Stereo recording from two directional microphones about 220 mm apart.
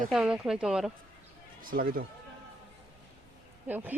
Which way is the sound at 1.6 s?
40° right (ahead or behind).